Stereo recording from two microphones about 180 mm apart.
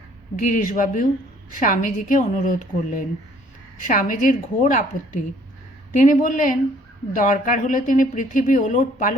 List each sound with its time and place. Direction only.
0.3 s speech: 45° left (ahead or behind)